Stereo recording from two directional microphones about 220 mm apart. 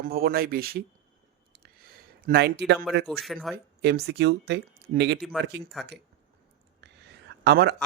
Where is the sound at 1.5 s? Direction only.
45° right (ahead or behind).